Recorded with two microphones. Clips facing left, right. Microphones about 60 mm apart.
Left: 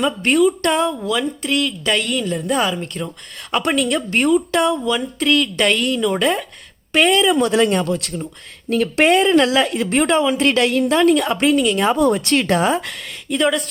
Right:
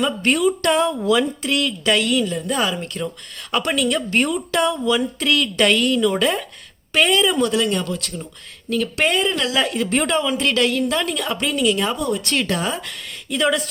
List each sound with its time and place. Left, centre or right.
0.0 s a woman's voice: centre
1.5 s a woman's voice: centre
7.5 s speech: left
8.0 s speech: centre
8.7 s speech: left
9.0 s a woman's voice: centre
9.6 s speech: centre
10.1 s a woman's voice: centre
11.9 s speech: left
12.5 s a woman's voice: left
12.9 s speech: centre